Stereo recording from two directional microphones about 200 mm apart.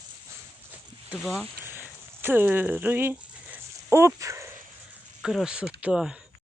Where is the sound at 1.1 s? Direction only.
5° right (ahead or behind).